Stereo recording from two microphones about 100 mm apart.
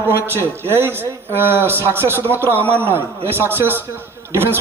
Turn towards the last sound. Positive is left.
turn(degrees=-25)  # may be behind; listen again after turning